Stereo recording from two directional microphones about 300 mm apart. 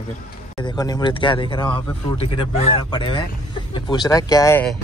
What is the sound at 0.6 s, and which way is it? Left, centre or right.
Speech, centre.